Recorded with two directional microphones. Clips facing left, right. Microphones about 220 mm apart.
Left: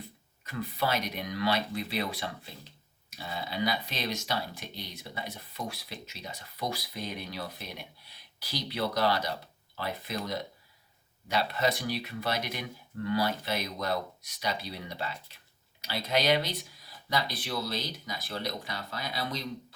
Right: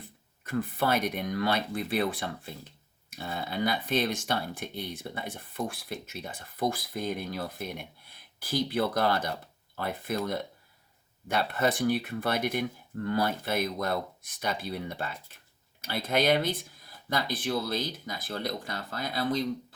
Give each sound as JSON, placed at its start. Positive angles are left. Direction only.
{"t": 0.4, "sound": "speech", "side_deg": -50}